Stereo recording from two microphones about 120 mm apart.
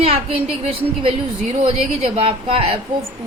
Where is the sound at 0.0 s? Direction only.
55° right (ahead or behind).